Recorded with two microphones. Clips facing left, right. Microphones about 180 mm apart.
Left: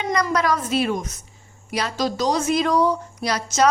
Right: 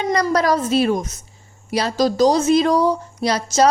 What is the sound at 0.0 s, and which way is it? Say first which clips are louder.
A woman's voice: right 4 dB; 35° right (ahead or behind).